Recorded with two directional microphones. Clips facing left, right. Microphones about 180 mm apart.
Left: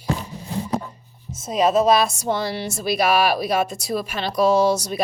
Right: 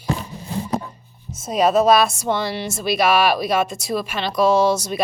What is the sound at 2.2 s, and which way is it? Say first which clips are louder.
Speech: right 1 dB; 35° left (ahead or behind).